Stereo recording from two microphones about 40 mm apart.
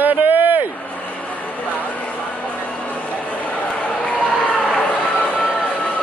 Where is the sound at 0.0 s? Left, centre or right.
Right.